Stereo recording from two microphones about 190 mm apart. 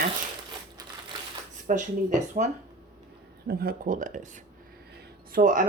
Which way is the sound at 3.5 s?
50° right (ahead or behind).